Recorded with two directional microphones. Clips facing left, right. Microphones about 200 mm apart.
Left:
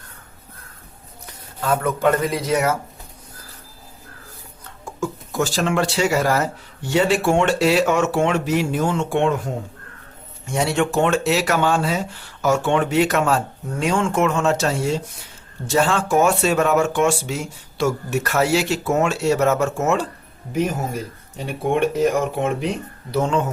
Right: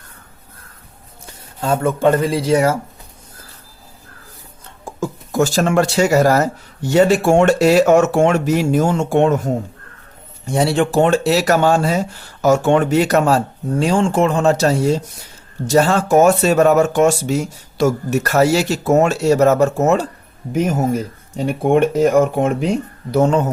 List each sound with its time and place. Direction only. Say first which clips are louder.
1.6 s speech: right 4 dB; 30° right (ahead or behind)
4.9 s speech: right 2 dB; 40° right (ahead or behind)
10.4 s speech: right 4 dB; 35° right (ahead or behind)
21.3 s speech: right 6 dB; 50° right (ahead or behind)